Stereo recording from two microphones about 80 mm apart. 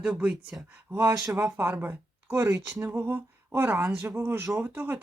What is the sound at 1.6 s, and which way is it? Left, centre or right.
Speech, right.